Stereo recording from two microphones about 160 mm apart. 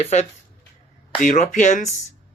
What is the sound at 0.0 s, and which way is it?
Speech, 45° left (ahead or behind).